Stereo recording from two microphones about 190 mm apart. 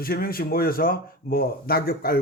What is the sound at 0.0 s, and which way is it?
Speech, 50° left (ahead or behind).